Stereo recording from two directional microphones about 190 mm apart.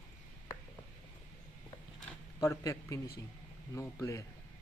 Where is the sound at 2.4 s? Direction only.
20° left (ahead or behind).